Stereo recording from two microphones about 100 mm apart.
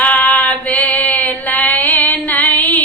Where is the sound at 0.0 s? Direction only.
15° left (ahead or behind).